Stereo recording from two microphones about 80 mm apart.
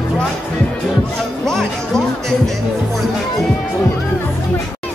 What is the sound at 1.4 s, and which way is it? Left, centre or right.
Music, centre.